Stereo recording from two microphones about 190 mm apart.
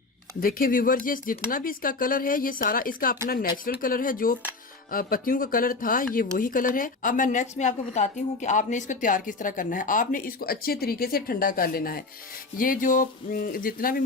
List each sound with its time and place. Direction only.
0.3 s a woman's voice: 50° left (ahead or behind)